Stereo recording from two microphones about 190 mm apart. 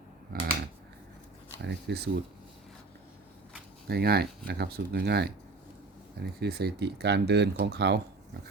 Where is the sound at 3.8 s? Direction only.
55° right (ahead or behind).